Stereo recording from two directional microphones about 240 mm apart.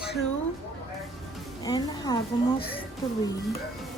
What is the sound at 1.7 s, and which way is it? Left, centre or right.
Music, centre.